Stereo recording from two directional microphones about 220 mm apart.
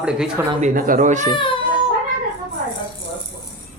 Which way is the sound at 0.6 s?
35° right (ahead or behind).